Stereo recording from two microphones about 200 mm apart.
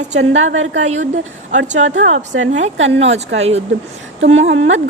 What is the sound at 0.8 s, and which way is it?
Speech, 35° right (ahead or behind).